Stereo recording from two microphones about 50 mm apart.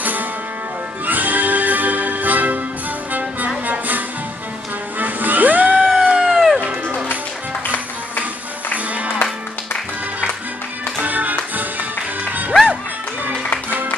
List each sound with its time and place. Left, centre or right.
1.0 s music: right
5.9 s a sound: centre
6.2 s music: centre
8.7 s music: right
11.0 s music: right